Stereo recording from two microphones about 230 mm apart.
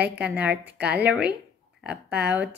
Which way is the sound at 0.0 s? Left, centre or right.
Centre.